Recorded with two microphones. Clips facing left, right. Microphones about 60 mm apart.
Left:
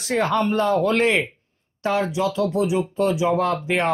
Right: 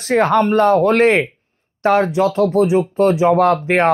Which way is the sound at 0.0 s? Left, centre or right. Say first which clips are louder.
Right 7 dB; right.